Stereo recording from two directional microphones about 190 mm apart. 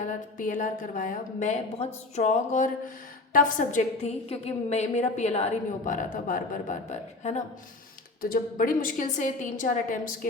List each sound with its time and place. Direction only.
0.0 s a woman's voice: 40° left (ahead or behind)
8.2 s a woman's voice: 50° left (ahead or behind)